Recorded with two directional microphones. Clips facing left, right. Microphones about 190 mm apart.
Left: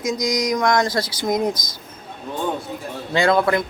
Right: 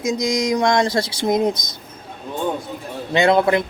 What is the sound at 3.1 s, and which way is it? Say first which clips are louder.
Speech: right 2 dB; 20° right (ahead or behind).